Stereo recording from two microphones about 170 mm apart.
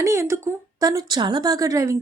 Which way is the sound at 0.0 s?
15° right (ahead or behind).